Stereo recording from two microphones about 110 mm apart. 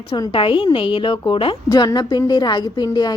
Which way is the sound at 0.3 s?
50° left (ahead or behind).